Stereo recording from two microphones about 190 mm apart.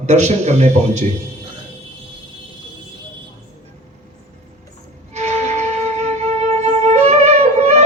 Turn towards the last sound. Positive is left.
turn(degrees=-35)  # may be behind; listen again after turning